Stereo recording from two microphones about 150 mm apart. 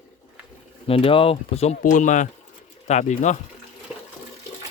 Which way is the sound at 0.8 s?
40° left (ahead or behind).